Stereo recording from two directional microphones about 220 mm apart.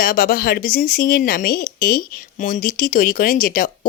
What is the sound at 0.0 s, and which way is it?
Speech, 40° left (ahead or behind).